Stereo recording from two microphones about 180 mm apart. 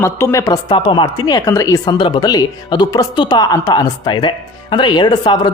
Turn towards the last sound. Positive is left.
turn(degrees=25)  # may be behind; listen again after turning